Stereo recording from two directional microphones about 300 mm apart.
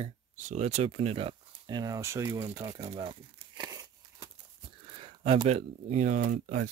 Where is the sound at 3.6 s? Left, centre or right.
Centre.